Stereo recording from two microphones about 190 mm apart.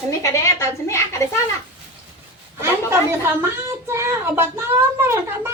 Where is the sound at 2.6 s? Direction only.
10° right (ahead or behind).